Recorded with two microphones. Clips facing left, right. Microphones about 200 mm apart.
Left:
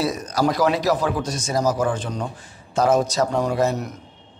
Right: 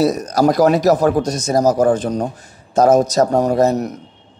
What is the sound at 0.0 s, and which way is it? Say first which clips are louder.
A man's voice: right 7 dB; 40° right (ahead or behind).